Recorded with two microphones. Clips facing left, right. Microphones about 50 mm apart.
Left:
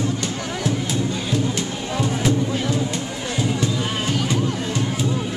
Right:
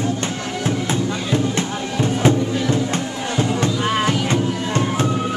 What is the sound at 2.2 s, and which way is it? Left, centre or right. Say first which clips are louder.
Music: right 5 dB; right.